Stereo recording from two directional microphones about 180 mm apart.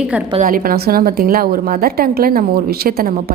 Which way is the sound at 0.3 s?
50° right (ahead or behind).